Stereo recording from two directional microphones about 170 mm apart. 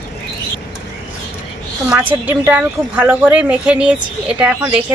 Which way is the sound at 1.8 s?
10° right (ahead or behind).